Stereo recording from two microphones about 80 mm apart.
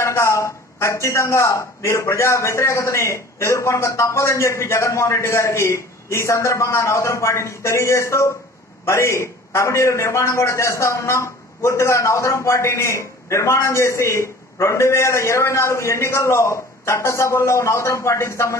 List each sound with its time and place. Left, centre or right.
0.0 s a man's voice: left